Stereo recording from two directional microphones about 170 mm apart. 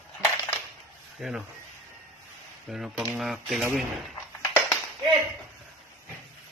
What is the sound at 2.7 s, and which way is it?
Speech, centre (ahead or behind).